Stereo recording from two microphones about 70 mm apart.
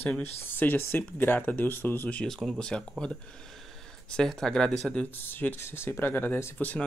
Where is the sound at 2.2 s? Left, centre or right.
Centre.